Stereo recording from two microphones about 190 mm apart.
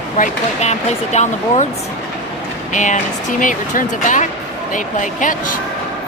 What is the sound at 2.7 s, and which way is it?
A woman's voice, 40° left (ahead or behind).